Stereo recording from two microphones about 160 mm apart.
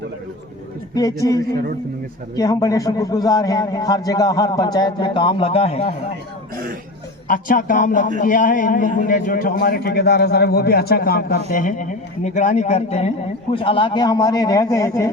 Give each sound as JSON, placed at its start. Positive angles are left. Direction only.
{"t": 0.9, "sound": "a man's voice", "side_deg": 20}
{"t": 7.3, "sound": "a man's voice", "side_deg": 60}